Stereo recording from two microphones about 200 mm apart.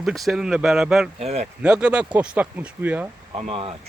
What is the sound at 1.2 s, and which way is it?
Speech, 30° right (ahead or behind).